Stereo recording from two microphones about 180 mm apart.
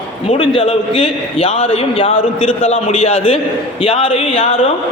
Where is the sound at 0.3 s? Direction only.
30° left (ahead or behind).